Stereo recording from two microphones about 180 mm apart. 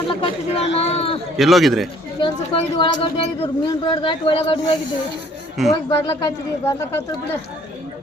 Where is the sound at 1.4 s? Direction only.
Centre (ahead or behind).